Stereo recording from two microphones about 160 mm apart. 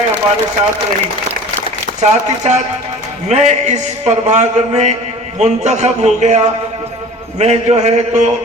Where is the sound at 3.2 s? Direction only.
45° right (ahead or behind).